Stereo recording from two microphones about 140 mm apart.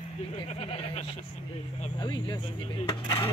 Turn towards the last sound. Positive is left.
turn(degrees=35)  # may be behind; listen again after turning